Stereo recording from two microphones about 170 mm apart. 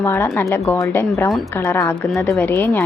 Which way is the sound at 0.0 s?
15° left (ahead or behind).